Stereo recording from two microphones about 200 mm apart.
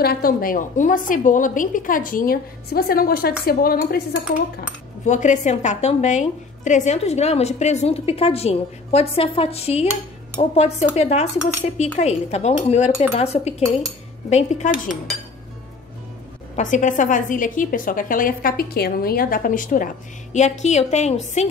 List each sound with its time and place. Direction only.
0.0 s a woman's voice: 50° left (ahead or behind)
5.0 s a woman's voice: 35° left (ahead or behind)
16.5 s a woman's voice: 40° left (ahead or behind)